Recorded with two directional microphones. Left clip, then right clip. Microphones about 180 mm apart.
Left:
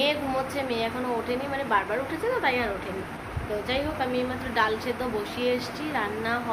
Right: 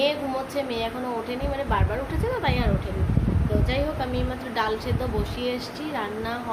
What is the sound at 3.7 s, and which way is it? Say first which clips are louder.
A woman's voice: left 2 dB; 15° right (ahead or behind).